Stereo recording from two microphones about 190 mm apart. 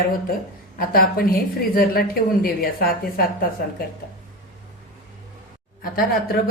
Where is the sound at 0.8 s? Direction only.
50° left (ahead or behind).